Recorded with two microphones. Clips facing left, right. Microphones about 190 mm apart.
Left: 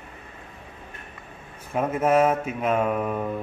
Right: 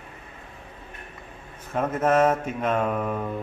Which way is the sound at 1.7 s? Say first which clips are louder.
Left 1 dB; 10° left (ahead or behind).